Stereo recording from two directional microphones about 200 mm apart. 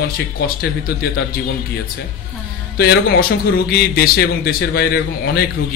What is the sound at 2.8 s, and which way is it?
A man's voice, 50° left (ahead or behind).